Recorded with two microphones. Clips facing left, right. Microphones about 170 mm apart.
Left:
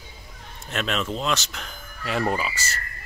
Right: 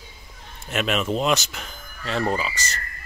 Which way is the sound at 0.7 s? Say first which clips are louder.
Right 4 dB; 10° right (ahead or behind).